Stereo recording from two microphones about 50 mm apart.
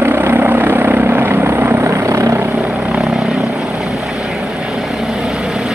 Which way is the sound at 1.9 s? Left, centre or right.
Right.